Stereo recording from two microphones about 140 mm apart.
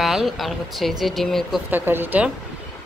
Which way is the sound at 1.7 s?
15° right (ahead or behind).